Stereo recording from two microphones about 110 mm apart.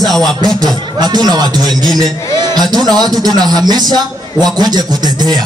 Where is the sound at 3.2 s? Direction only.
40° right (ahead or behind).